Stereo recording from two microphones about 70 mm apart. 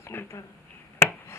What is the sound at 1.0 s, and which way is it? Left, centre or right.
Chopping, left.